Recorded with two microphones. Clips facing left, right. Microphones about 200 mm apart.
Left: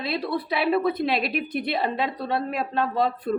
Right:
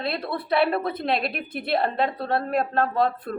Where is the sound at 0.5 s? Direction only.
Centre (ahead or behind).